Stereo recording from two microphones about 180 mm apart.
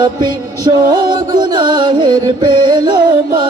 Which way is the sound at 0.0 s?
25° right (ahead or behind).